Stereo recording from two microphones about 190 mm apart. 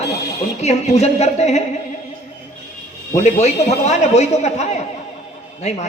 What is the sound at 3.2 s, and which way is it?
A man's voice, 35° left (ahead or behind).